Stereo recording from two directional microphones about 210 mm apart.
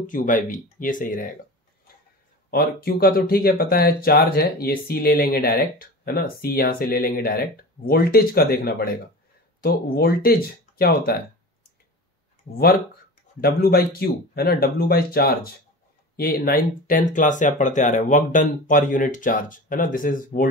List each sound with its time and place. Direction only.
0.0 s speech: 40° left (ahead or behind)
2.5 s speech: 45° left (ahead or behind)
13.4 s speech: 45° left (ahead or behind)